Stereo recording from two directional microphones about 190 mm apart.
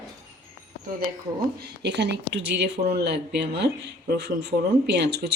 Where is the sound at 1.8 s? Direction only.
65° right (ahead or behind).